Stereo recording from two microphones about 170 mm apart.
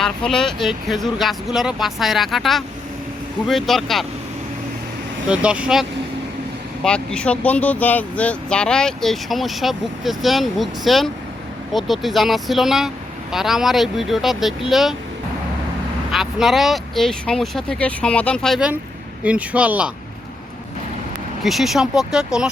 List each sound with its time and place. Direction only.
0.0 s speech: 5° left (ahead or behind)
5.3 s speech: 5° right (ahead or behind)
6.8 s speech: 5° left (ahead or behind)
16.1 s speech: centre (ahead or behind)
21.4 s speech: centre (ahead or behind)